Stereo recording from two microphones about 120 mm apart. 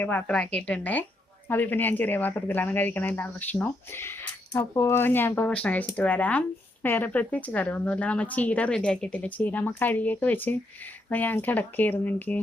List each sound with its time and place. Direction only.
0.0 s speech: 15° left (ahead or behind)